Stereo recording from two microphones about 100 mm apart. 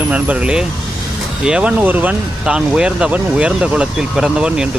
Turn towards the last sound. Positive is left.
turn(degrees=-5)  # may be behind; listen again after turning